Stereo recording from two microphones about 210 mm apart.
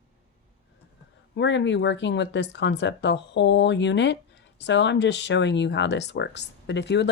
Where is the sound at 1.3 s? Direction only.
55° left (ahead or behind).